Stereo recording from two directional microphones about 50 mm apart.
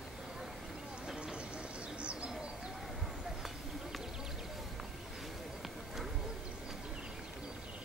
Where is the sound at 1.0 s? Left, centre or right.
Centre.